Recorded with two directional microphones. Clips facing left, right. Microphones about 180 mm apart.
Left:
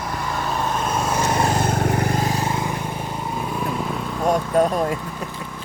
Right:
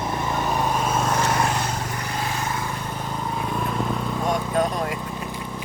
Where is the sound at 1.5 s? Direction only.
55° left (ahead or behind).